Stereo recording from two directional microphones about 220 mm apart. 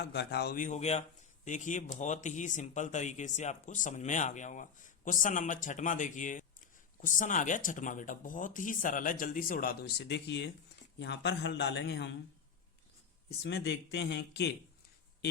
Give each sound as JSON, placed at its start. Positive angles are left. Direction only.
{"t": 0.0, "sound": "a man's voice", "side_deg": 50}
{"t": 13.4, "sound": "a man's voice", "side_deg": 50}